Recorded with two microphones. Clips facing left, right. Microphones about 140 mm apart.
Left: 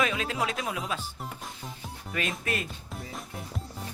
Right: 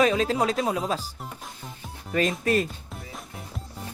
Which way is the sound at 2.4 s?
35° right (ahead or behind).